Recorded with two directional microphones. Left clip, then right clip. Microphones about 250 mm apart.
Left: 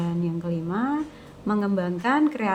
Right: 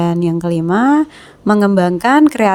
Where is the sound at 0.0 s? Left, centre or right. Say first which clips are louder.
Right 14 dB; right.